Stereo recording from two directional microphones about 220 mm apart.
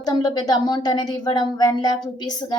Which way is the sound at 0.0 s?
20° left (ahead or behind).